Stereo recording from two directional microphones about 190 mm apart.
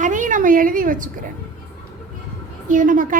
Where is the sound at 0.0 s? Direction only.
40° right (ahead or behind).